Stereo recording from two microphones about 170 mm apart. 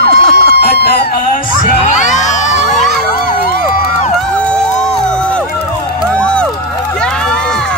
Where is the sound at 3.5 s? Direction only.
50° left (ahead or behind).